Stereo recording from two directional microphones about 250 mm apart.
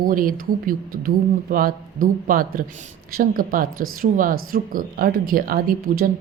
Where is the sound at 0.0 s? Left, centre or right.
Right.